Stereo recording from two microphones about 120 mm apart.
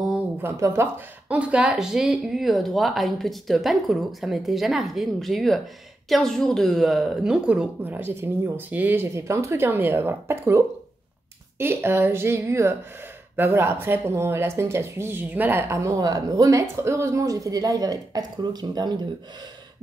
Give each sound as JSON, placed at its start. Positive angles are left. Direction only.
{"t": 0.4, "sound": "speech", "side_deg": -20}